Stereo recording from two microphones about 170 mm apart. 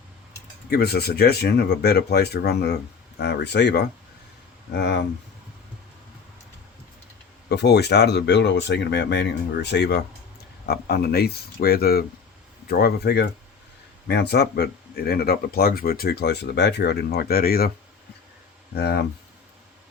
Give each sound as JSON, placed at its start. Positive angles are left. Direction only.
{"t": 0.7, "sound": "speech", "side_deg": 70}
{"t": 7.5, "sound": "speech", "side_deg": 80}
{"t": 18.7, "sound": "speech", "side_deg": 70}